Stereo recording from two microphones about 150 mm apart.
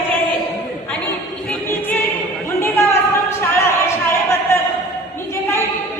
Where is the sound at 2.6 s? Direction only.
15° left (ahead or behind).